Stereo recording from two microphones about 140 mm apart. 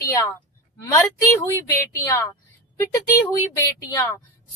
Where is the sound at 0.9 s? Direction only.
15° left (ahead or behind).